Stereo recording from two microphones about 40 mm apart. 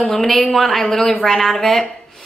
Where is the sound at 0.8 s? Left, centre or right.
Centre.